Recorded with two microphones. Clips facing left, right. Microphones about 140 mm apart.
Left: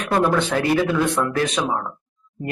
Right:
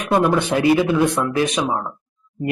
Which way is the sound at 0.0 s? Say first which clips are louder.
Right 2 dB; 15° right (ahead or behind).